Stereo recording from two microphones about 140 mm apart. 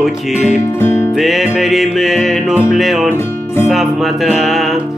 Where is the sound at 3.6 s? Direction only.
Centre (ahead or behind).